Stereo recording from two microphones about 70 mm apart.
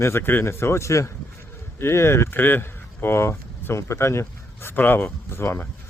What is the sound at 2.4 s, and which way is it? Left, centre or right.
Speech, left.